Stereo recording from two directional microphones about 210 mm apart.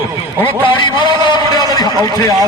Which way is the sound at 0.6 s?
20° left (ahead or behind).